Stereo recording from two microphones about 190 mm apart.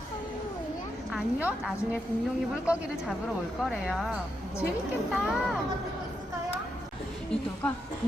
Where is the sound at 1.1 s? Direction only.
5° right (ahead or behind).